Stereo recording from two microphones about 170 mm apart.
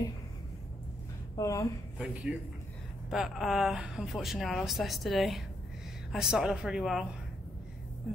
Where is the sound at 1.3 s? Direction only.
20° left (ahead or behind).